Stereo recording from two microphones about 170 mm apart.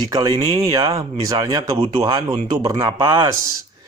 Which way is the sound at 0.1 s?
20° right (ahead or behind).